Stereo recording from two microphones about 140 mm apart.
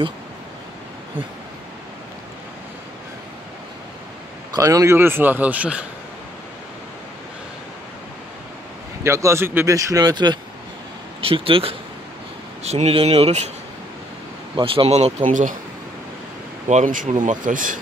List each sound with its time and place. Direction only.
4.6 s a man's voice: 25° right (ahead or behind)
9.0 s speech: 20° right (ahead or behind); by 13.5 s 50° right (ahead or behind)
14.6 s speech: 40° right (ahead or behind)
15.2 s speech: 70° right (ahead or behind)
16.6 s speech: 65° right (ahead or behind)